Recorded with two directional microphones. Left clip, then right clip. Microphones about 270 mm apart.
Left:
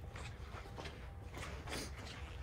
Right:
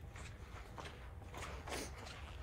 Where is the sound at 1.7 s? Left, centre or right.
Right.